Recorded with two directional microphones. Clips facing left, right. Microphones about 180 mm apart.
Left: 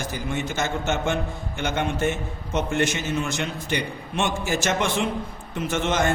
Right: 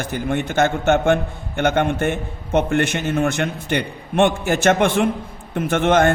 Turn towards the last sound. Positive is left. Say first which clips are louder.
# right 7 dB
turn(degrees=-55)  # may be behind; listen again after turning